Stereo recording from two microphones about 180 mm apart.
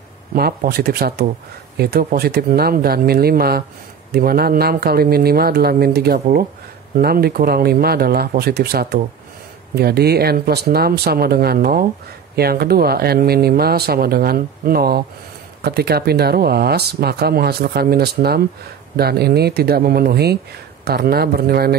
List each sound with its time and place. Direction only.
0.3 s speech: 60° right (ahead or behind)